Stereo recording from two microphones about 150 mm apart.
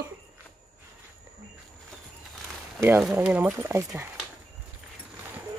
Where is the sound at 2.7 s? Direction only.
15° right (ahead or behind).